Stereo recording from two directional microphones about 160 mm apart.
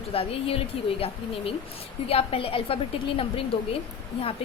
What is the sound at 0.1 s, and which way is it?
A woman's voice, 35° left (ahead or behind).